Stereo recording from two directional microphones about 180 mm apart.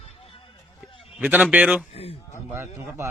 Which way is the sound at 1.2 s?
10° right (ahead or behind).